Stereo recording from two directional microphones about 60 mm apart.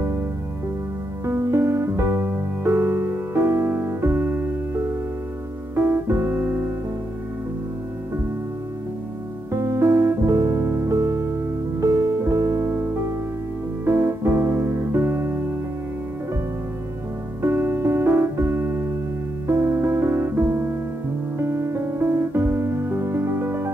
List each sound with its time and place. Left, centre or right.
1.2 s music: right
5.8 s piano: right
9.5 s music: right
10.6 s music: right
13.8 s keyboard: right
17.4 s music: right
19.4 s music: right